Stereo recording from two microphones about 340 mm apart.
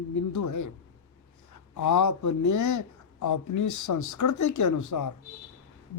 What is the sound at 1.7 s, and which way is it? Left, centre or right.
Speech, left.